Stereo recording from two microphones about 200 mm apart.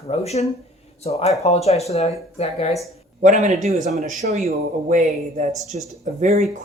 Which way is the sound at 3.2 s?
35° right (ahead or behind).